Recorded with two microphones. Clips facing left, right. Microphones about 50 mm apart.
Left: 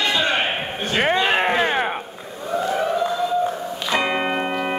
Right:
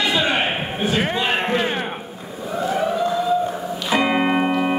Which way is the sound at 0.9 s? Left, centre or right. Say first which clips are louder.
Left 4 dB; centre.